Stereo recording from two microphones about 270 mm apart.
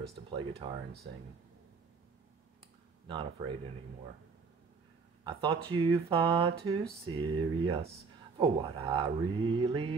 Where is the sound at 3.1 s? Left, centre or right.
Centre.